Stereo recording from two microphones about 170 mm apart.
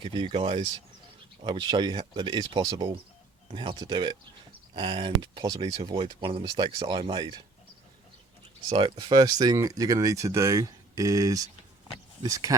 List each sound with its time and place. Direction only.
0.0 s speech: 30° right (ahead or behind)
8.7 s speech: 30° right (ahead or behind)